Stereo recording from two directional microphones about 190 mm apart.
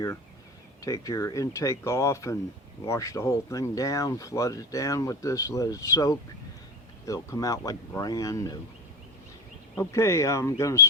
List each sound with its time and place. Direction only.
0.8 s speech: 20° left (ahead or behind)
9.7 s speech: 15° left (ahead or behind)